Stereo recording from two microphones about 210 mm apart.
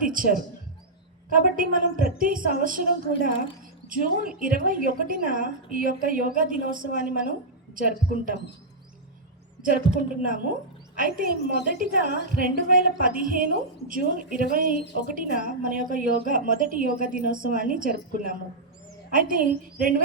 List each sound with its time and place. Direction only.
0.0 s a woman's voice: 40° right (ahead or behind)
9.6 s a woman's voice: 40° right (ahead or behind)